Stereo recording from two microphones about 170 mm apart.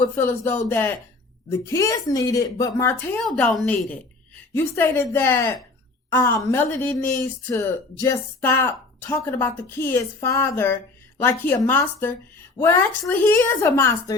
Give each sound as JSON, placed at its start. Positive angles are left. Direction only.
{"t": 0.0, "sound": "a woman's voice", "side_deg": 15}
{"t": 3.2, "sound": "a woman's voice", "side_deg": 0}
{"t": 4.5, "sound": "a woman's voice", "side_deg": 15}